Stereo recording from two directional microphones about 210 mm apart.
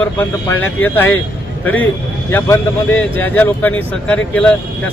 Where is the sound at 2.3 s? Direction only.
10° left (ahead or behind).